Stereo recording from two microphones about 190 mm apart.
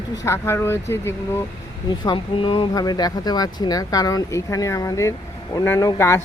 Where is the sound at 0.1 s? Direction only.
15° left (ahead or behind).